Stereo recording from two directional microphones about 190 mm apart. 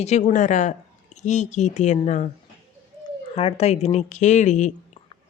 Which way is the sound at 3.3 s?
30° left (ahead or behind).